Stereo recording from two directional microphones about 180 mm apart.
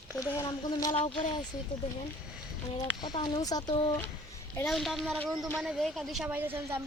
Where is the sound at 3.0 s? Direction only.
25° left (ahead or behind).